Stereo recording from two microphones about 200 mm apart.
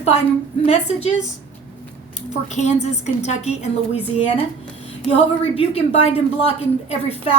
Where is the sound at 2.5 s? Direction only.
35° left (ahead or behind).